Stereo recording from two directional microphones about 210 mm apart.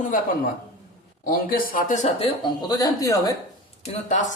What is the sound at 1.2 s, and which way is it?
Speech, 40° left (ahead or behind).